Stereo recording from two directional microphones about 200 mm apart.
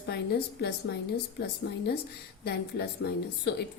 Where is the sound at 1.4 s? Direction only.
55° left (ahead or behind).